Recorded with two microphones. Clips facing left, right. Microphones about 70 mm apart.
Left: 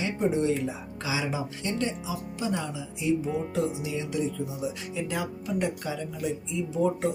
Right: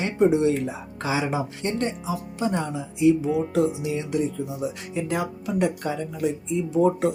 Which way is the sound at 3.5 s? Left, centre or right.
Right.